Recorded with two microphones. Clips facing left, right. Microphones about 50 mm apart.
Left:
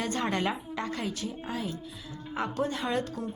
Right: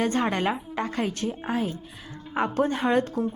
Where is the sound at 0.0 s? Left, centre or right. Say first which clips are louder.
Right 7 dB; right.